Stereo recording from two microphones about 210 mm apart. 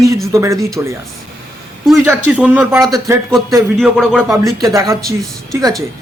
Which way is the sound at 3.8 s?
Centre (ahead or behind).